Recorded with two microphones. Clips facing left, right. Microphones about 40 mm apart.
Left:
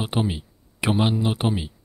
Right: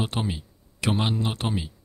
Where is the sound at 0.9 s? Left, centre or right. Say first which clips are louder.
Left 5 dB; centre.